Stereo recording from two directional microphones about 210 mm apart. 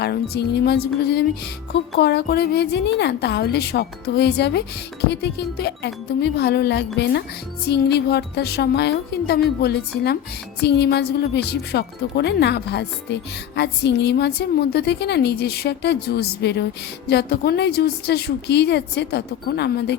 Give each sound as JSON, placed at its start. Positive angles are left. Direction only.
{"t": 0.0, "sound": "a woman's voice", "side_deg": 50}